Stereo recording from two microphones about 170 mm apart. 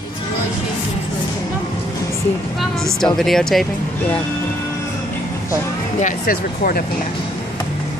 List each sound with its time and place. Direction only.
3.2 s speech: centre (ahead or behind)
5.9 s speech: 50° left (ahead or behind)